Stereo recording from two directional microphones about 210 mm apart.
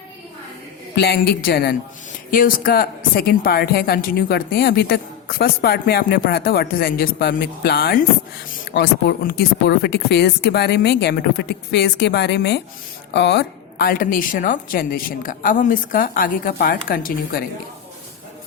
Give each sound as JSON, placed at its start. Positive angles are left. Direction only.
{"t": 0.9, "sound": "a woman's voice", "side_deg": 50}